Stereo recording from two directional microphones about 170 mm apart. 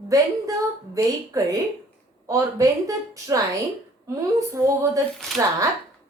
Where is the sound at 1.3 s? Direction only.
20° right (ahead or behind).